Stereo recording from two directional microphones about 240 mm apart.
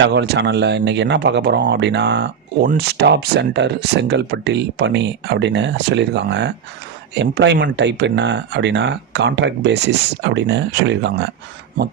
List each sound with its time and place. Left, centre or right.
0.0 s speech: right